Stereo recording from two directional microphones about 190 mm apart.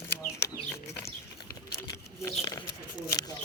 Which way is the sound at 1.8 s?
20° left (ahead or behind).